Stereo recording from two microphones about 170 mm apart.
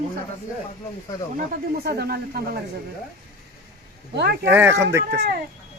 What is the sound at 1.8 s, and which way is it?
Speech, 65° right (ahead or behind).